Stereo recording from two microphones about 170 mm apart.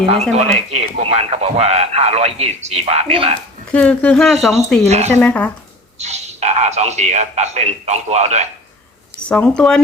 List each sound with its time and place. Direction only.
0.1 s speech: 40° right (ahead or behind)
3.7 s speech: 5° left (ahead or behind)
4.9 s speech: 40° right (ahead or behind)
5.1 s speech: 5° left (ahead or behind)
6.0 s speech: 40° right (ahead or behind)
9.3 s speech: 5° left (ahead or behind)